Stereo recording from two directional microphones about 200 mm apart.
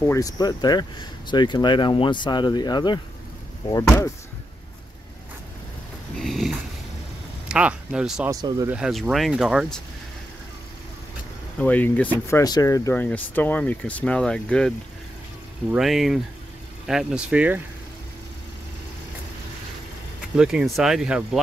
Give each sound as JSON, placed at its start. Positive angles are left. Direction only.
{"t": 0.0, "sound": "speech", "side_deg": 15}
{"t": 6.1, "sound": "a sound", "side_deg": 0}
{"t": 7.4, "sound": "speech", "side_deg": -5}
{"t": 8.3, "sound": "speech", "side_deg": -20}
{"t": 8.7, "sound": "speech", "side_deg": -5}
{"t": 11.6, "sound": "speech", "side_deg": 10}
{"t": 15.7, "sound": "speech", "side_deg": 0}
{"t": 20.3, "sound": "speech", "side_deg": -5}